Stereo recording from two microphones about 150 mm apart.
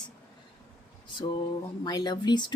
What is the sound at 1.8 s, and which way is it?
Speech, 30° left (ahead or behind).